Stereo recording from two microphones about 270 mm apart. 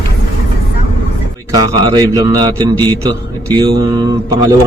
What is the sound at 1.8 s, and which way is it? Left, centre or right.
A man's voice, centre.